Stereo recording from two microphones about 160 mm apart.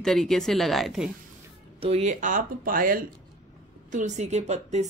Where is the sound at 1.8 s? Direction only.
45° right (ahead or behind); by 3.0 s 60° right (ahead or behind).